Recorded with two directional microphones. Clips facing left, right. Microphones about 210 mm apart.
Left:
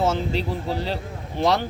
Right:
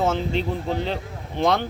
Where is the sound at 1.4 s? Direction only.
5° left (ahead or behind).